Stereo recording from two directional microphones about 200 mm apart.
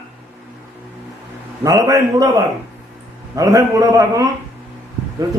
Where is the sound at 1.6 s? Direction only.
15° right (ahead or behind).